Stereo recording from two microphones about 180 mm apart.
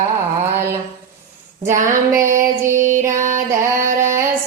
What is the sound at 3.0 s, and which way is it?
Music, 45° right (ahead or behind).